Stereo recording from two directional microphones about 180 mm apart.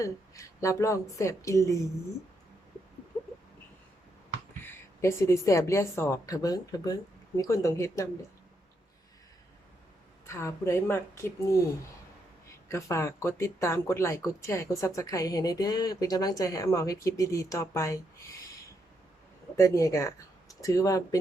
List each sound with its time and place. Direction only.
0.0 s speech: 15° left (ahead or behind)
4.6 s speech: 15° left (ahead or behind)
10.2 s speech: 15° left (ahead or behind)
12.6 s speech: 15° left (ahead or behind)
19.5 s speech: 15° left (ahead or behind)